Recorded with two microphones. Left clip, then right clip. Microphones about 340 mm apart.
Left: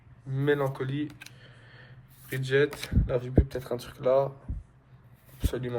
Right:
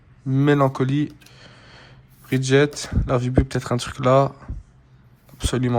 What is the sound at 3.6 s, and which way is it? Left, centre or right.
Speech, right.